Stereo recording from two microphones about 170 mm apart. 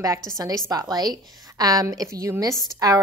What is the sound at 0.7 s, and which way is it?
A woman's voice, 20° right (ahead or behind).